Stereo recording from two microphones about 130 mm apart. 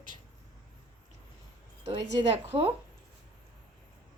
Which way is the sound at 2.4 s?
50° right (ahead or behind).